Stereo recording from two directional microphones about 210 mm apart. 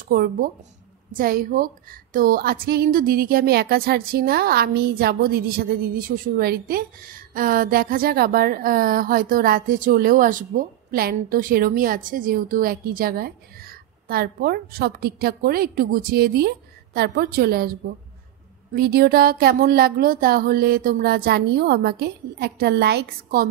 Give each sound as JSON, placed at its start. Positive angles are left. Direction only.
{"t": 0.1, "sound": "a woman's voice", "side_deg": -45}